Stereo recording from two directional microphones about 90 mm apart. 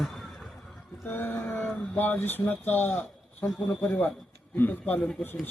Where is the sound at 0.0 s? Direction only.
Centre (ahead or behind).